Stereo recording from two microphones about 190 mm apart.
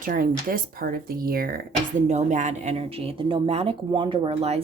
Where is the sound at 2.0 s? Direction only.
40° right (ahead or behind).